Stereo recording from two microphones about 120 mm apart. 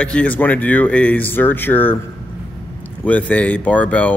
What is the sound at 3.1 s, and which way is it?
A man's voice, 10° left (ahead or behind).